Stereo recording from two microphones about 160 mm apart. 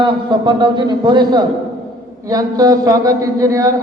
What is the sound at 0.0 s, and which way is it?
A man's voice, 30° right (ahead or behind).